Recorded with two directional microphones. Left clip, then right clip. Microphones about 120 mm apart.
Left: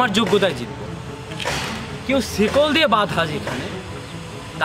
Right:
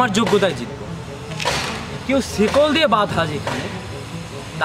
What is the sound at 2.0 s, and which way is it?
Speech, centre (ahead or behind).